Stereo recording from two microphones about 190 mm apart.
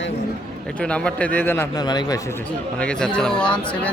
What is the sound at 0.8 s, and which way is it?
A man's voice, 5° left (ahead or behind).